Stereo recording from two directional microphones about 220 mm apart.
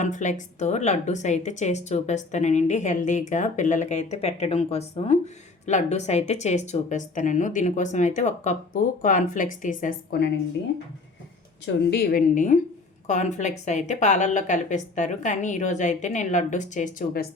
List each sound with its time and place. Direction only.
0.0 s a woman's voice: 35° left (ahead or behind)
11.6 s a woman's voice: 45° left (ahead or behind)